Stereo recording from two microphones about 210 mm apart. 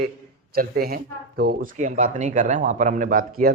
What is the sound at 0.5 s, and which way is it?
Speech, 45° right (ahead or behind).